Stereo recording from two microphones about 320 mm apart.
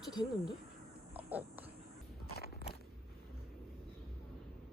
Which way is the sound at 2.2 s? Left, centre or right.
Left.